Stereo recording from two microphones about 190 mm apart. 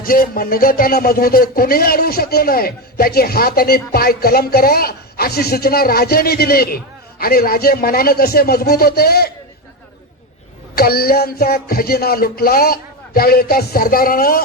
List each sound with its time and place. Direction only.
0.0 s speech: 50° left (ahead or behind)
10.8 s speech: 55° left (ahead or behind)